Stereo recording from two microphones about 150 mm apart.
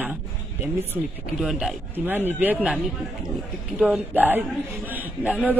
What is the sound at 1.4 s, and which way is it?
Speech, 5° right (ahead or behind).